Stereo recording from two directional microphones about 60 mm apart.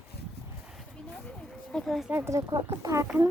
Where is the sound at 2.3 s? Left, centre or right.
Right.